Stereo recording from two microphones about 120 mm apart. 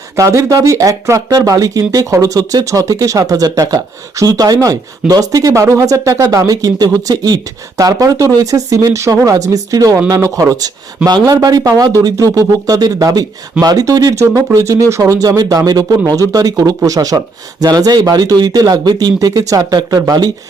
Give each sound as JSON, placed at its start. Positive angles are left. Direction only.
{"t": 0.2, "sound": "speech", "side_deg": -25}